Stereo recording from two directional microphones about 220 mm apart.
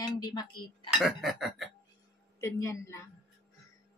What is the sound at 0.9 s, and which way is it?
Speech, centre (ahead or behind).